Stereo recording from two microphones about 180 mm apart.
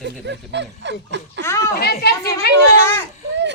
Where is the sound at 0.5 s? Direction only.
75° right (ahead or behind).